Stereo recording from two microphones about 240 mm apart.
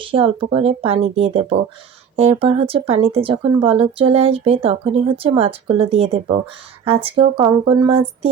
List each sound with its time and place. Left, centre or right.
0.0 s speech: right